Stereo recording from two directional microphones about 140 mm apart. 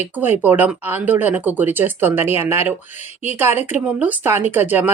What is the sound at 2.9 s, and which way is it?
Speech, 55° left (ahead or behind).